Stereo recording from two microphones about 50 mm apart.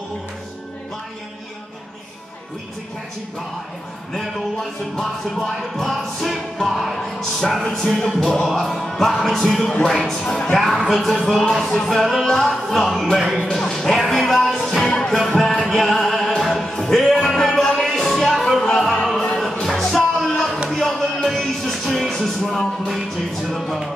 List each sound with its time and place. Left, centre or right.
4.1 s speech: centre
7.6 s music: centre
8.5 s speech: centre
9.8 s music: centre
10.5 s speech: centre
13.5 s music: centre
19.1 s music: centre